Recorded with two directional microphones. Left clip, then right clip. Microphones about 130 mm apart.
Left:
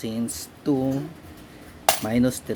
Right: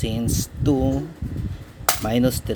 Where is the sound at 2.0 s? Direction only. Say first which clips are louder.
Right 2 dB; 30° right (ahead or behind).